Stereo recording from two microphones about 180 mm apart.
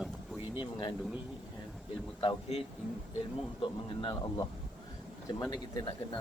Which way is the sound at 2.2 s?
35° left (ahead or behind).